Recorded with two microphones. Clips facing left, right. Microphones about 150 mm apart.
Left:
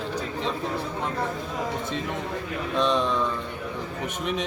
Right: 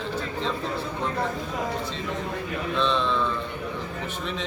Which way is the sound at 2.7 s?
15° left (ahead or behind).